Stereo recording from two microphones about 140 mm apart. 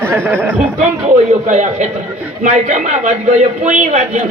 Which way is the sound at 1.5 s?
60° right (ahead or behind).